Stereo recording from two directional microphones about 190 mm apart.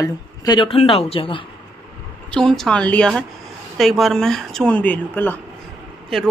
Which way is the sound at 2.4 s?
5° left (ahead or behind).